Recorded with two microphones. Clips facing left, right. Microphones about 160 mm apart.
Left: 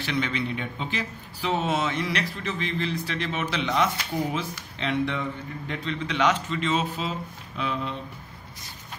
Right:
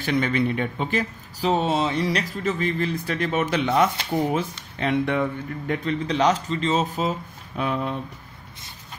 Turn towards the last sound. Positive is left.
turn(degrees=-50)  # may be behind; listen again after turning